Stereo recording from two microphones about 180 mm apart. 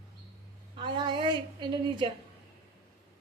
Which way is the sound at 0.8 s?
25° right (ahead or behind).